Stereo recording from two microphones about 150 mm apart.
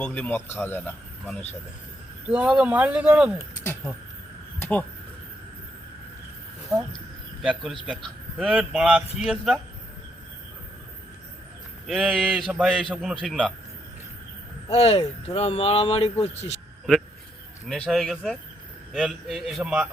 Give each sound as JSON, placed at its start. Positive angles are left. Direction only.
{"t": 0.0, "sound": "speech", "side_deg": 10}
{"t": 2.2, "sound": "speech", "side_deg": -5}
{"t": 4.6, "sound": "speech", "side_deg": 10}
{"t": 7.4, "sound": "a man's voice", "side_deg": -5}
{"t": 11.9, "sound": "a man's voice", "side_deg": -5}
{"t": 14.7, "sound": "speech", "side_deg": 45}
{"t": 17.7, "sound": "a man's voice", "side_deg": 5}